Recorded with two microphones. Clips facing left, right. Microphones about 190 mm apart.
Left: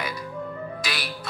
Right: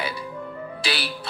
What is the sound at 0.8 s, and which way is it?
Music, 30° right (ahead or behind).